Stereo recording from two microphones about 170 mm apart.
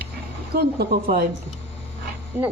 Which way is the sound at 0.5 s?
65° right (ahead or behind).